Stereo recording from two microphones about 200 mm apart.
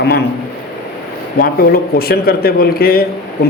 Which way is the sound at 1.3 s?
50° left (ahead or behind).